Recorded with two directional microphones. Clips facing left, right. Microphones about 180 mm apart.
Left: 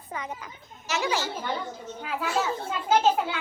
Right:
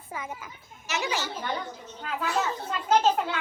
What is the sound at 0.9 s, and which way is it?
Speech, 20° right (ahead or behind).